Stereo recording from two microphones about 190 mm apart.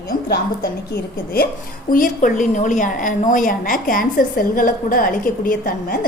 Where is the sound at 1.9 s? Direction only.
45° left (ahead or behind).